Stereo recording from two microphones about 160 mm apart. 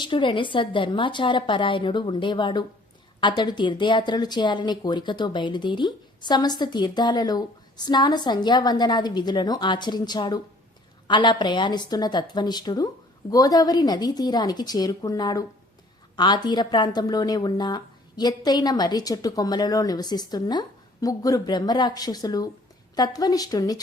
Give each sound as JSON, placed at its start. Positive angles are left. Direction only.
{"t": 0.0, "sound": "speech", "side_deg": 30}